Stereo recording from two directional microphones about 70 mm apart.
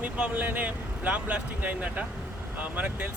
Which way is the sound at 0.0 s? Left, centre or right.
Right.